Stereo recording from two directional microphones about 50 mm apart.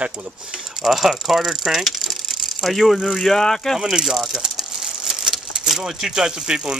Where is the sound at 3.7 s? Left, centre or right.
Centre.